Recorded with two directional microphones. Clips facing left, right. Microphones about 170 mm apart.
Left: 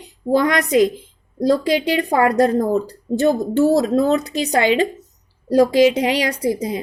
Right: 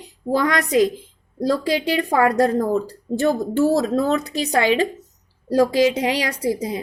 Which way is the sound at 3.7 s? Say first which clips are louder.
Left 4 dB; 20° left (ahead or behind).